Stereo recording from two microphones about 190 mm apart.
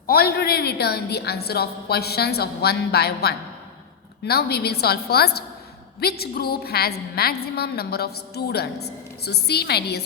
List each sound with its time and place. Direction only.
0.1 s a woman's voice: 55° left (ahead or behind)